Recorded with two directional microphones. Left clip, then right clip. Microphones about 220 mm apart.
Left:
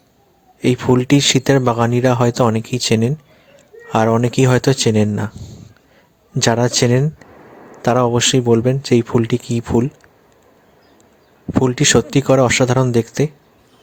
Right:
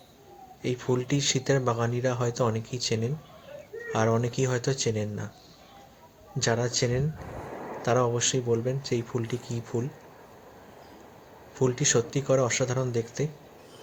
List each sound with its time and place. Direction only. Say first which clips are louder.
0.6 s speech: left 13 dB; 50° left (ahead or behind)
6.4 s speech: left 12 dB; 55° left (ahead or behind)
11.6 s speech: left 10 dB; 50° left (ahead or behind)